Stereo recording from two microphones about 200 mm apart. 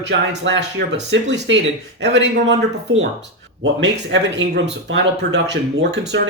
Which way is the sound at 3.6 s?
65° right (ahead or behind).